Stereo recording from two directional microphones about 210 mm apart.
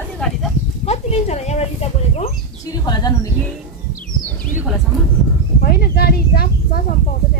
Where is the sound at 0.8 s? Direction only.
30° left (ahead or behind).